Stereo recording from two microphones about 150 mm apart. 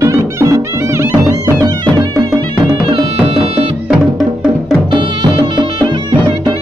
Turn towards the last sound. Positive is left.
turn(degrees=-30)  # may be behind; listen again after turning